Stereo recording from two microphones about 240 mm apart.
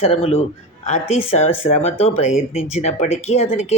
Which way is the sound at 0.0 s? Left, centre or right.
Left.